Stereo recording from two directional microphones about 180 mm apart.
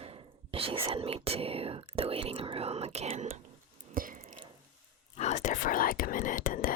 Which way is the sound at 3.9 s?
50° right (ahead or behind).